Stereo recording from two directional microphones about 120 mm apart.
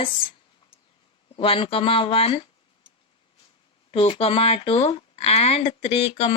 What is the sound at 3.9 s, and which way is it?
Speech, 50° left (ahead or behind).